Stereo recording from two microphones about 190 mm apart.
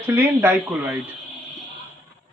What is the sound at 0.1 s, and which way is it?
Speech, 10° right (ahead or behind).